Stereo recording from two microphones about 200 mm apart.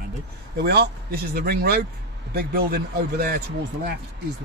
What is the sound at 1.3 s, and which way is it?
A man's voice, 50° right (ahead or behind).